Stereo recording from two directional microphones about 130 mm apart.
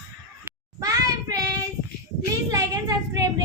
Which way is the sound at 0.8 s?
25° right (ahead or behind).